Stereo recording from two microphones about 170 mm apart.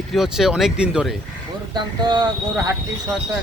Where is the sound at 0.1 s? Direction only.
Centre (ahead or behind).